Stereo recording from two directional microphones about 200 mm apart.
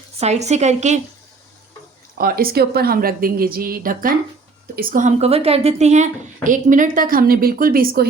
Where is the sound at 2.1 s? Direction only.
45° right (ahead or behind).